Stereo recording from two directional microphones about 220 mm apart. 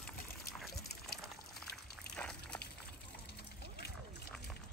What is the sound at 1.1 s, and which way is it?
Liquid, 45° left (ahead or behind).